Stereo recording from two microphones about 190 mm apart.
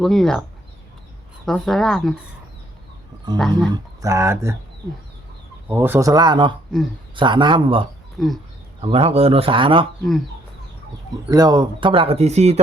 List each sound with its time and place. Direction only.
0.0 s speech: centre (ahead or behind)
1.5 s speech: centre (ahead or behind)
3.3 s speech: centre (ahead or behind)
3.7 s speech: 15° right (ahead or behind)
5.6 s a man's voice: 10° right (ahead or behind); by 7.9 s 25° right (ahead or behind)
8.2 s speech: centre (ahead or behind)
8.8 s a man's voice: 30° right (ahead or behind)
11.1 s a man's voice: 20° right (ahead or behind); by 12.5 s 35° right (ahead or behind)